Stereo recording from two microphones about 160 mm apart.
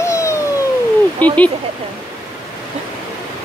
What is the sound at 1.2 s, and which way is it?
Speech, 10° left (ahead or behind).